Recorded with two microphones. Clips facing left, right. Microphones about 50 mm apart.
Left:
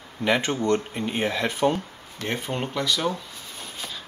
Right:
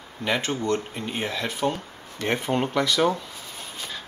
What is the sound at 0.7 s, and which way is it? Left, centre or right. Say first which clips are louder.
Speech: left 3 dB; centre.